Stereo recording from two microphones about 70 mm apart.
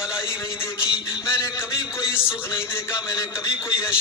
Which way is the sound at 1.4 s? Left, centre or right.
Left.